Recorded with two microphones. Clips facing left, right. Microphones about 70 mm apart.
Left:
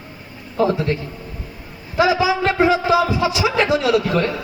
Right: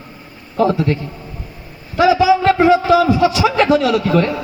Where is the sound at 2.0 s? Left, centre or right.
Centre.